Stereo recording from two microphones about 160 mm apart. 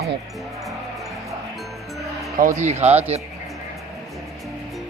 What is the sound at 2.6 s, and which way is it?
Speech, 45° right (ahead or behind).